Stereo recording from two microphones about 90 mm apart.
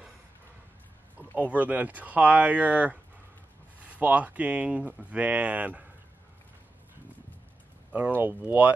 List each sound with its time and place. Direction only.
1.1 s speech: 15° right (ahead or behind)
8.2 s speech: 20° right (ahead or behind)